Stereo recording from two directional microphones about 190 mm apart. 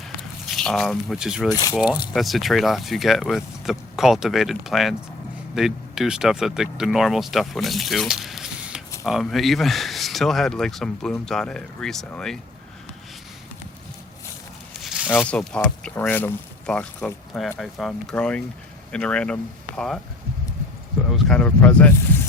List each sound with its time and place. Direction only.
0.2 s speech: 5° left (ahead or behind)
1.5 s speech: 20° left (ahead or behind)
2.1 s speech: centre (ahead or behind)
14.8 s zipper: 5° right (ahead or behind)
15.1 s speech: 5° left (ahead or behind)
21.1 s speech: 5° left (ahead or behind)